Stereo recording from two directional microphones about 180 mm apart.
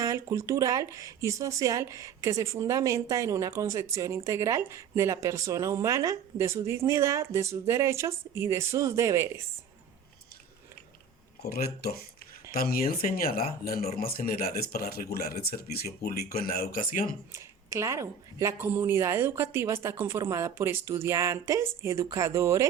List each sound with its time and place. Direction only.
0.0 s speech: 15° right (ahead or behind)
11.5 s speech: 60° left (ahead or behind)
17.3 s speech: 15° right (ahead or behind)